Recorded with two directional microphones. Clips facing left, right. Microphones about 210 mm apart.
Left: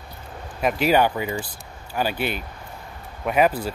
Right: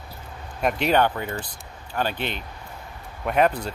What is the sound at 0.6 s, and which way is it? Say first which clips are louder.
Speech: left 2 dB; 5° left (ahead or behind).